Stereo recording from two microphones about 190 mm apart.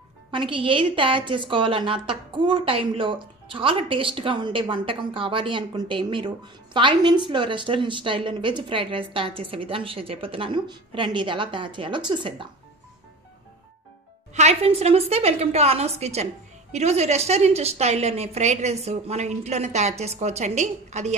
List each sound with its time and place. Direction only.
0.3 s a woman's voice: 25° right (ahead or behind)
14.3 s a woman's voice: 35° right (ahead or behind)